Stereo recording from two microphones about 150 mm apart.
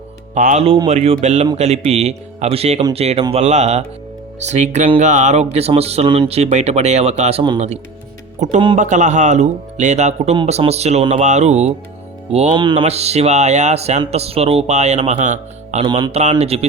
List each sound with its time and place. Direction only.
0.3 s speech: 60° right (ahead or behind)
0.9 s speech: 45° right (ahead or behind)
8.4 s speech: 50° right (ahead or behind)
12.5 s speech: 30° right (ahead or behind); by 15.9 s 50° right (ahead or behind)
15.9 s speech: 30° right (ahead or behind)
16.4 s speech: 45° right (ahead or behind)